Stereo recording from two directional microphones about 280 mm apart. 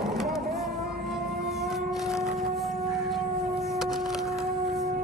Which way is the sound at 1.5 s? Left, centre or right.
Centre.